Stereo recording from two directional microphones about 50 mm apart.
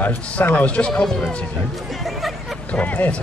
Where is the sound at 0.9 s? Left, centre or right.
Centre.